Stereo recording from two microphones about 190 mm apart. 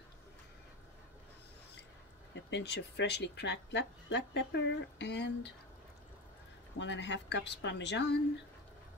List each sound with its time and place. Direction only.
2.3 s speech: 65° left (ahead or behind)
6.8 s speech: 65° left (ahead or behind)